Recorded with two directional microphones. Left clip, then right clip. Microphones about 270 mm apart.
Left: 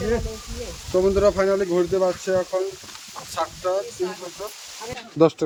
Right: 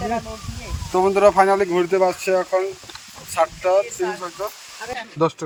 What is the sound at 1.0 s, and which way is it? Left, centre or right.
Speech, centre.